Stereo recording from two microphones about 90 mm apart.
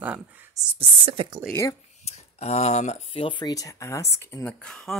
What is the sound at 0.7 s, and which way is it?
Speech, 90° right.